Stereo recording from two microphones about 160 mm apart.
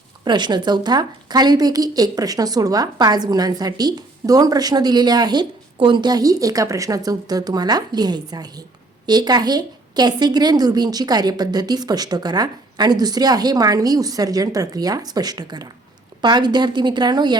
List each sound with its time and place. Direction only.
0.3 s a woman's voice: 25° right (ahead or behind)